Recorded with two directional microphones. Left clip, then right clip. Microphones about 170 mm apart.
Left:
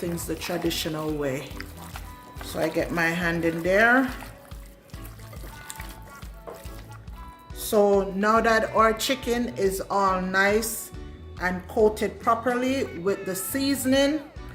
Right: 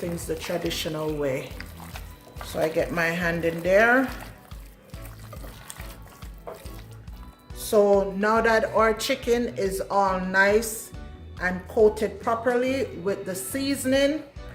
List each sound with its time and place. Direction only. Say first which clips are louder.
0.3 s speech: even; 15° left (ahead or behind)
7.6 s speech: right 1 dB; 10° left (ahead or behind)